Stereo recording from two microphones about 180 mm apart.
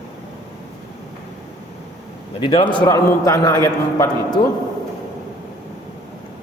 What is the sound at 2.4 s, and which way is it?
A man's voice, 25° left (ahead or behind).